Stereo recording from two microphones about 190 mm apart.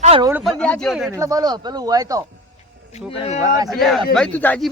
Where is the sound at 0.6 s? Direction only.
5° left (ahead or behind).